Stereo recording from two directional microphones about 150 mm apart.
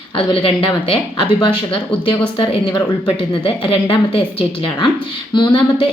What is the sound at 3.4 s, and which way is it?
Speech, 35° left (ahead or behind).